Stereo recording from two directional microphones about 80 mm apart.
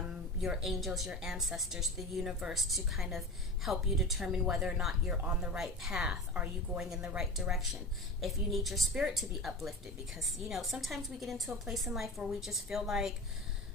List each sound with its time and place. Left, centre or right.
0.4 s a woman's voice: centre
5.2 s a woman's voice: centre